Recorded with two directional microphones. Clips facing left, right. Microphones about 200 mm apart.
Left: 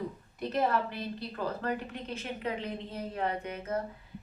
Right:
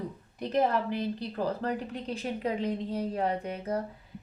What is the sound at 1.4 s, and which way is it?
Speech, 35° right (ahead or behind).